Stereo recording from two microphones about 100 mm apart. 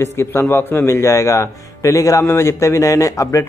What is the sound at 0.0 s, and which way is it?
A man's voice, 25° left (ahead or behind).